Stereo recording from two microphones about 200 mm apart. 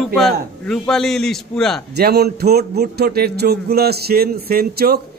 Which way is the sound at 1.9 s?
55° right (ahead or behind).